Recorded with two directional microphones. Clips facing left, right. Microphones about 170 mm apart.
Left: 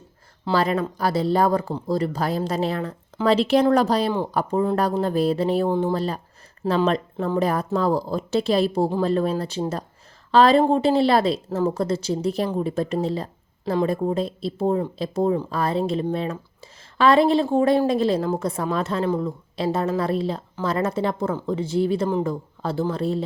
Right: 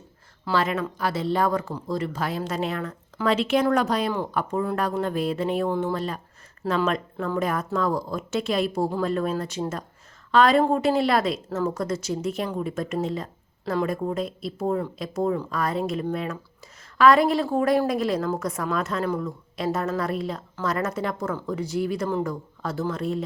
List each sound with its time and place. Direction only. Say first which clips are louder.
0.4 s speech: left 3 dB; 35° left (ahead or behind)